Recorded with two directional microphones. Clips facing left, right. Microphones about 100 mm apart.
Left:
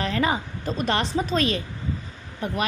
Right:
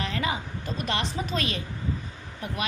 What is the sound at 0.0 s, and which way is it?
A woman's voice, 40° left (ahead or behind).